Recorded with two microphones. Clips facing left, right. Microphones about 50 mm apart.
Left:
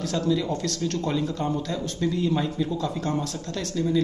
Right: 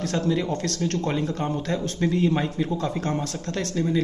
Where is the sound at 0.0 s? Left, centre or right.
Right.